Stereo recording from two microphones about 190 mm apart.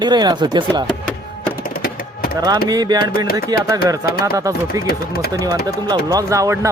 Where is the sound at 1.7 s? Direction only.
50° left (ahead or behind).